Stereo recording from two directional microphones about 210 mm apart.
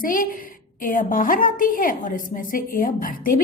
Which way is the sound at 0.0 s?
40° left (ahead or behind).